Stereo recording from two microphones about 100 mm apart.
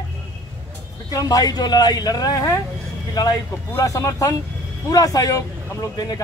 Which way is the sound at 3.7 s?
30° left (ahead or behind).